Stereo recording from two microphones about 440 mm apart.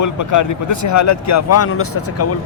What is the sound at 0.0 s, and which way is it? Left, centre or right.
Speech, left.